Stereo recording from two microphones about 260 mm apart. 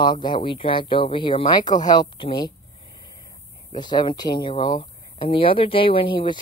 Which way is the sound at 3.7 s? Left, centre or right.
Centre.